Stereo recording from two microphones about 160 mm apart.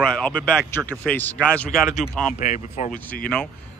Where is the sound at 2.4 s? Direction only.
50° left (ahead or behind).